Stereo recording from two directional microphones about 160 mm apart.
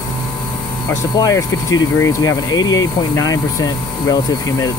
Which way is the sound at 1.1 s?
20° left (ahead or behind).